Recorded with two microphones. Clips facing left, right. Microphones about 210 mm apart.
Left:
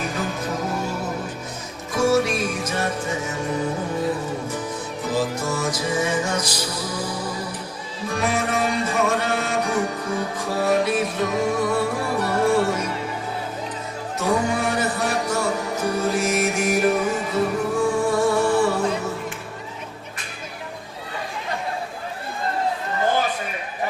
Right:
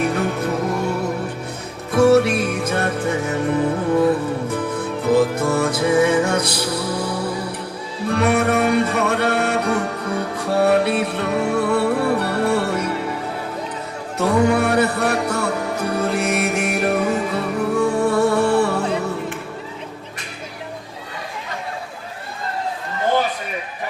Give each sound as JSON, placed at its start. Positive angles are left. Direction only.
{"t": 0.0, "sound": "music", "side_deg": -65}
{"t": 14.2, "sound": "music", "side_deg": -60}